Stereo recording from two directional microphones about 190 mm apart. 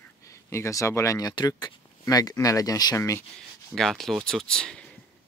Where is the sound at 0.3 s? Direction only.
15° left (ahead or behind).